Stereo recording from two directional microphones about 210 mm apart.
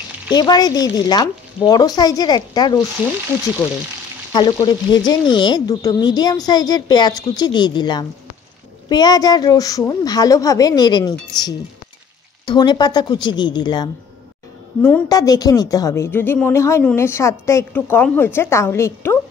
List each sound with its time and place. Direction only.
0.3 s speech: 20° left (ahead or behind)
4.3 s a woman's voice: 20° left (ahead or behind)
14.8 s a woman's voice: 10° left (ahead or behind)